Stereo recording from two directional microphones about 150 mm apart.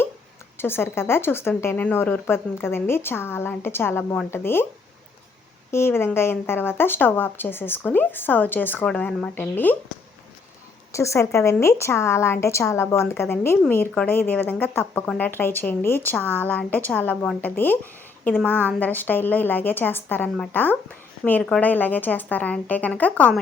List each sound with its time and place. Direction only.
0.5 s a woman's voice: 15° left (ahead or behind)
5.7 s a woman's voice: 15° left (ahead or behind)
10.9 s a woman's voice: 20° left (ahead or behind)